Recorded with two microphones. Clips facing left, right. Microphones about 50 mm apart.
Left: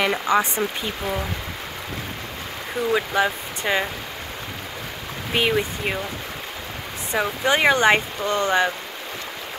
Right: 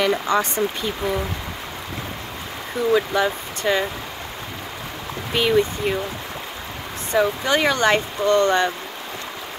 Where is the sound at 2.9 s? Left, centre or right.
Centre.